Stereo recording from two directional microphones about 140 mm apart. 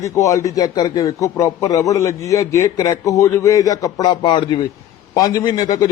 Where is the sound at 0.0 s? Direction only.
25° left (ahead or behind).